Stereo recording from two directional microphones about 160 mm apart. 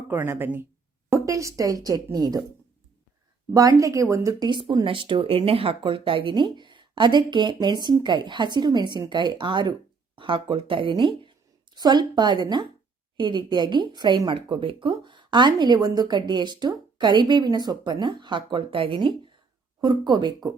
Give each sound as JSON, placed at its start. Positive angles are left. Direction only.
{"t": 0.1, "sound": "a woman's voice", "side_deg": -15}
{"t": 3.5, "sound": "a woman's voice", "side_deg": -20}